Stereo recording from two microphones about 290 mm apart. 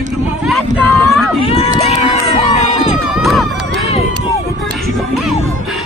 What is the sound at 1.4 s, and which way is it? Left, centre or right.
Run, centre.